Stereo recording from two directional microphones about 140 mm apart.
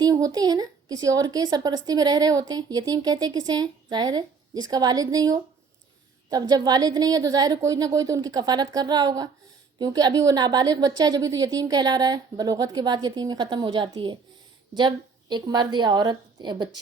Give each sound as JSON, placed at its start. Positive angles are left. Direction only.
{"t": 0.0, "sound": "a woman's voice", "side_deg": -25}